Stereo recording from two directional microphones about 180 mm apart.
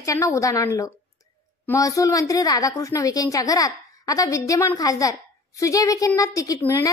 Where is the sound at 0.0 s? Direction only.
15° left (ahead or behind).